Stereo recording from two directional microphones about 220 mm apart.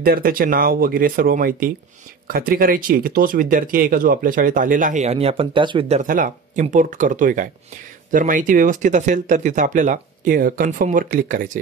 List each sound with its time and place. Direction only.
0.0 s speech: 40° right (ahead or behind)